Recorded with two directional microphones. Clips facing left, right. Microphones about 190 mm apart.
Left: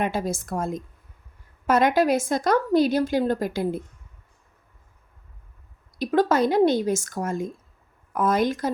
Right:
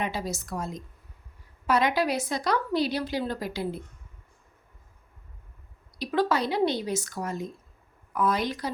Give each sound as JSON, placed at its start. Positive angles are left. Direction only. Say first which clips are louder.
{"t": 0.0, "sound": "a woman's voice", "louder": "left 5 dB", "side_deg": 50}
{"t": 6.0, "sound": "a woman's voice", "louder": "left 5 dB", "side_deg": 50}